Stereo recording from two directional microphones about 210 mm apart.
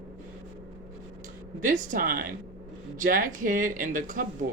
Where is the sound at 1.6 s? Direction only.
40° right (ahead or behind).